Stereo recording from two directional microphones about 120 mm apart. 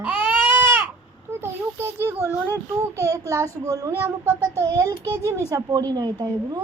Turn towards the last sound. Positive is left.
turn(degrees=-30)  # may be behind; listen again after turning